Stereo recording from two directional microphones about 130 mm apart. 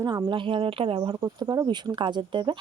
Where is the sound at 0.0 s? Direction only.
35° right (ahead or behind).